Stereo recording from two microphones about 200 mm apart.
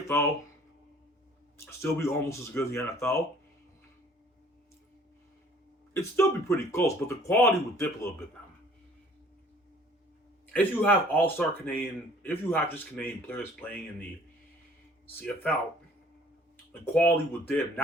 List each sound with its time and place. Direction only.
1.5 s speech: 15° left (ahead or behind)
5.9 s speech: 15° left (ahead or behind)
10.5 s speech: 10° left (ahead or behind)
16.8 s speech: 10° left (ahead or behind)